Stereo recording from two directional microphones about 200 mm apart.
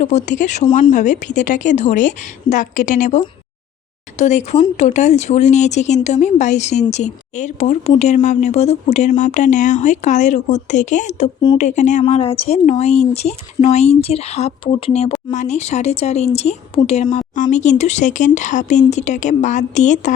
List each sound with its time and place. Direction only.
0.0 s speech: 35° left (ahead or behind)
4.2 s speech: 35° left (ahead or behind)